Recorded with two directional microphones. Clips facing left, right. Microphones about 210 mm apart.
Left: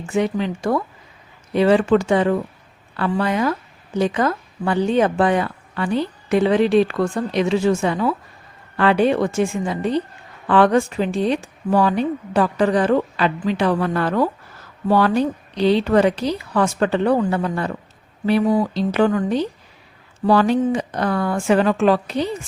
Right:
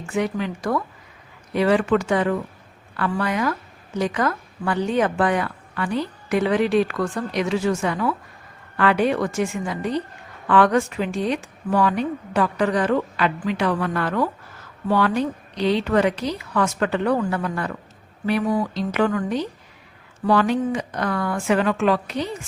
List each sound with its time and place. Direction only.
0.1 s a woman's voice: 25° left (ahead or behind)